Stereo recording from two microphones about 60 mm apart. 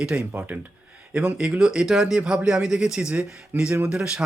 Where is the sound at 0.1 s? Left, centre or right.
Right.